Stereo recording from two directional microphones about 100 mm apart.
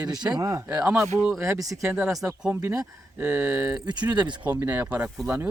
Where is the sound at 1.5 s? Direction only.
35° right (ahead or behind).